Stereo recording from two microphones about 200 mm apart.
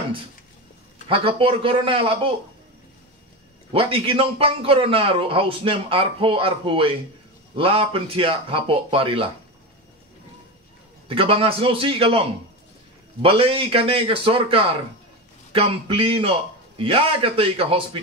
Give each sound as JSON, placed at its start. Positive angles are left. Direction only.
{"t": 1.0, "sound": "a man's voice", "side_deg": -25}
{"t": 3.7, "sound": "a man's voice", "side_deg": -25}
{"t": 11.1, "sound": "a man's voice", "side_deg": -25}